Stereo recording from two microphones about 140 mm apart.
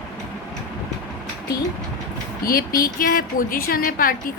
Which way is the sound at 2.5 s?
90° left.